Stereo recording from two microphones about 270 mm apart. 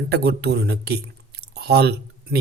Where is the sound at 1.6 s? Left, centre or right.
Right.